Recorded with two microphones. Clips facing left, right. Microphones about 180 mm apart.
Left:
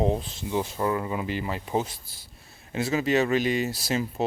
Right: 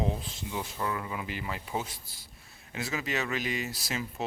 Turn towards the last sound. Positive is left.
turn(degrees=30)  # may be behind; listen again after turning